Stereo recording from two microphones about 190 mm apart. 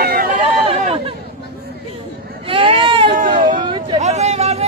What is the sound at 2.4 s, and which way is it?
Baby cry, 30° right (ahead or behind).